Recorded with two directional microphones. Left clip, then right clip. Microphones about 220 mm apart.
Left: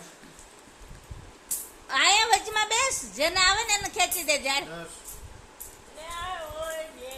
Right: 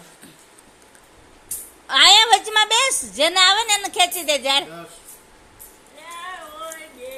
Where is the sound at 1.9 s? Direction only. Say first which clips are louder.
Right 9 dB; 25° right (ahead or behind).